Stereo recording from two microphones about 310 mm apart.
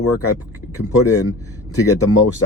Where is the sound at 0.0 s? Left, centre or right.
Left.